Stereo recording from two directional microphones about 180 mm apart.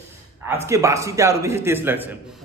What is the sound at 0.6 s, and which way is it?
A man's voice, 15° right (ahead or behind).